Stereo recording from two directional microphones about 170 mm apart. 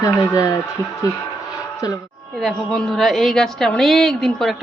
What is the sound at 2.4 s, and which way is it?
A woman's voice, centre (ahead or behind).